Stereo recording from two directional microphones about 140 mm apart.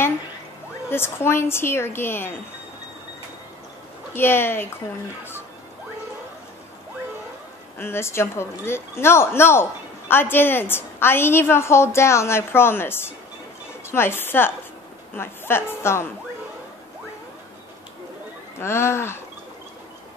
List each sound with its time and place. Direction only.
0.8 s speech: 15° left (ahead or behind)
4.1 s speech: 15° left (ahead or behind)
7.8 s speech: 20° left (ahead or behind)
18.6 s speech: 20° left (ahead or behind)